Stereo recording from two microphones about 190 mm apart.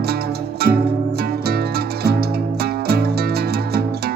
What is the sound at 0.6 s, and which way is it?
Music, 55° right (ahead or behind).